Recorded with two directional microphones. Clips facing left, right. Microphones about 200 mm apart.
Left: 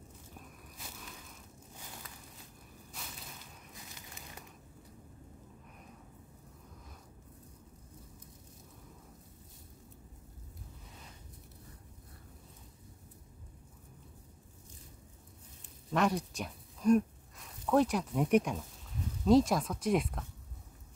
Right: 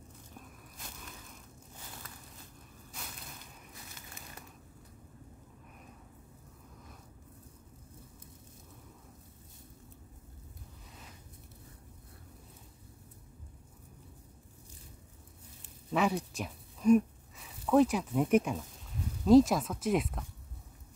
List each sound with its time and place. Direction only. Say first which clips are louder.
3.9 s crumpling: even; 15° left (ahead or behind)
15.9 s speech: even; 5° right (ahead or behind)